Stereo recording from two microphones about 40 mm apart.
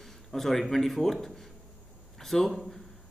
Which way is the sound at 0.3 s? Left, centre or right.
Centre.